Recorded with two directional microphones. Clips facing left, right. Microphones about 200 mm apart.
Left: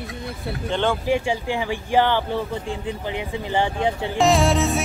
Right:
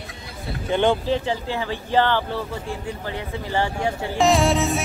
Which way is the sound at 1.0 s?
15° left (ahead or behind).